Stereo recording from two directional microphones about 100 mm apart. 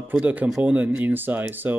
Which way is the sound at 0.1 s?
15° right (ahead or behind).